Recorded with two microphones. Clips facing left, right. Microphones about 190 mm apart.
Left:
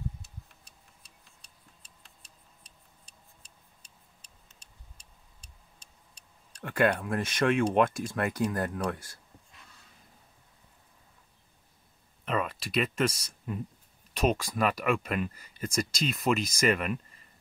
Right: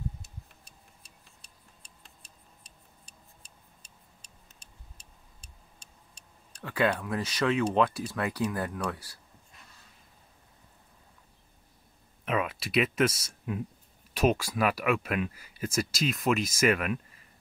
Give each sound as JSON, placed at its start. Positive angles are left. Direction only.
{"t": 6.6, "sound": "speech", "side_deg": 25}
{"t": 12.3, "sound": "speech", "side_deg": -5}